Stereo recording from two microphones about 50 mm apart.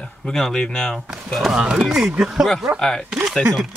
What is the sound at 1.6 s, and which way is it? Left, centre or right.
Speech, centre.